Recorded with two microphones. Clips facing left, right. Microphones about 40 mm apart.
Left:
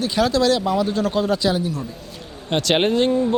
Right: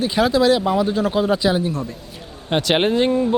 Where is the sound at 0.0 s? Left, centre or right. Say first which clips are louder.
Right 2 dB; centre.